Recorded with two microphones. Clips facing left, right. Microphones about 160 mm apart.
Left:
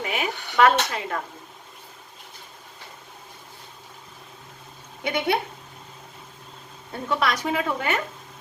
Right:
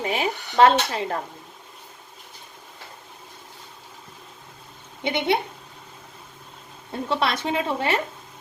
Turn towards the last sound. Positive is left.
turn(degrees=-30)  # may be behind; listen again after turning